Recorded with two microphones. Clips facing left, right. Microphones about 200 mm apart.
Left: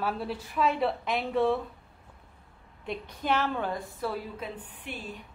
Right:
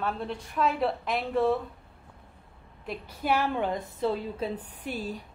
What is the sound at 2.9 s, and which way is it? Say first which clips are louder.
A woman's voice: right 1 dB; 5° right (ahead or behind).